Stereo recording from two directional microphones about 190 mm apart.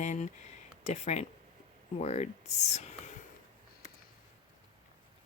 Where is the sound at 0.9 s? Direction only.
35° left (ahead or behind).